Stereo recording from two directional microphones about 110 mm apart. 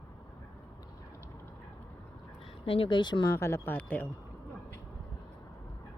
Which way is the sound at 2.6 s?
55° left (ahead or behind).